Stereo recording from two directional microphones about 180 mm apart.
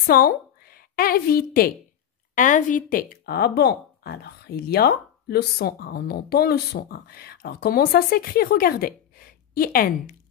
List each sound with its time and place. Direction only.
0.0 s a woman's voice: 55° left (ahead or behind)